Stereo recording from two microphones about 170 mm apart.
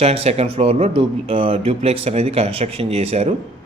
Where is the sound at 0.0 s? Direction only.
35° right (ahead or behind).